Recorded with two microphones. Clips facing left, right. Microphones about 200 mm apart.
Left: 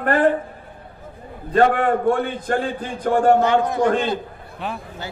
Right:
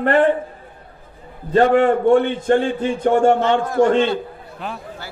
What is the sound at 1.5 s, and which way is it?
A woman's voice, 25° right (ahead or behind).